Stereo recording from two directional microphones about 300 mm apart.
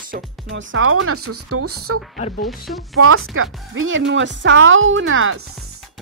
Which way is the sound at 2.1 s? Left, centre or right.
Left.